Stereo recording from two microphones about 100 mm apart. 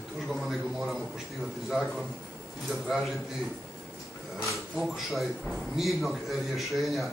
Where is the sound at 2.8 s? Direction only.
5° right (ahead or behind).